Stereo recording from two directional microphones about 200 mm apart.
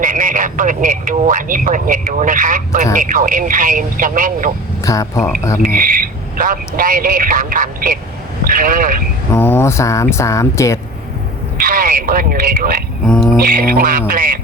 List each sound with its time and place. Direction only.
0.0 s a man's voice: 40° right (ahead or behind)
4.8 s speech: 15° left (ahead or behind)
5.6 s a man's voice: 45° right (ahead or behind)
9.3 s speech: 10° left (ahead or behind)
11.6 s speech: 45° right (ahead or behind)
13.1 s music: 5° left (ahead or behind)
13.4 s a man's voice: 45° right (ahead or behind)